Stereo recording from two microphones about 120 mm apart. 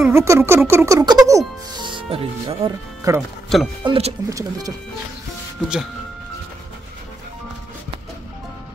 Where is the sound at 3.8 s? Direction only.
45° right (ahead or behind).